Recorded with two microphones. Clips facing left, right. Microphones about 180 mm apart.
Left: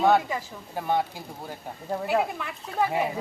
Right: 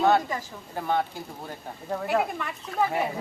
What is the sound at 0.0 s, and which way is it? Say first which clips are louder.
Speech: left 1 dB; 10° left (ahead or behind).